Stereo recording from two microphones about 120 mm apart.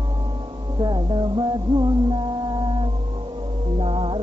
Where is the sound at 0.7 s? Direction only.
40° right (ahead or behind).